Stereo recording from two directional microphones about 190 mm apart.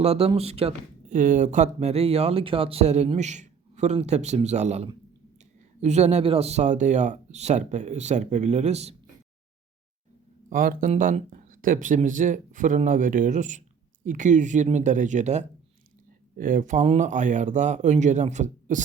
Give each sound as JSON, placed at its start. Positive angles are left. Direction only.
{"t": 0.0, "sound": "speech", "side_deg": -35}
{"t": 10.5, "sound": "speech", "side_deg": -45}